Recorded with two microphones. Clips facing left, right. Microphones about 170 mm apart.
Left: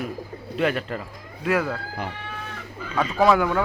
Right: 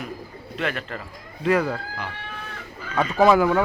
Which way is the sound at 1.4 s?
Centre (ahead or behind).